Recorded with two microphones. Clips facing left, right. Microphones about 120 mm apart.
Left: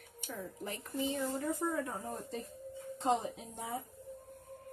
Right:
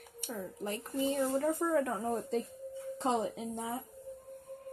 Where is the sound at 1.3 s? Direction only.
80° right.